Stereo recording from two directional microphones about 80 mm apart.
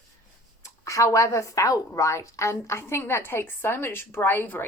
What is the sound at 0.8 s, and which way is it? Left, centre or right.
A woman's voice, left.